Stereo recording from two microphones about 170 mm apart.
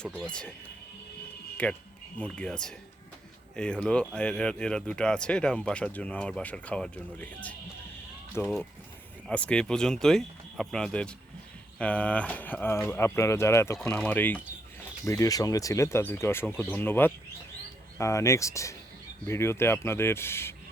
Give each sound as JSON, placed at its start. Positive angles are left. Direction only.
{"t": 0.0, "sound": "speech", "side_deg": 5}
{"t": 1.6, "sound": "speech", "side_deg": 5}